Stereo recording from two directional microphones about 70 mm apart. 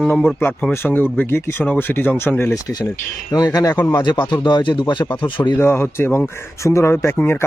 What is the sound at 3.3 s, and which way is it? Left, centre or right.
Speech, left.